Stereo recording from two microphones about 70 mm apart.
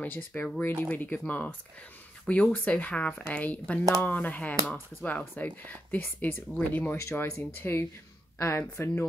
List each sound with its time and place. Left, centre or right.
0.0 s speech: left
2.5 s speech: left
7.0 s speech: left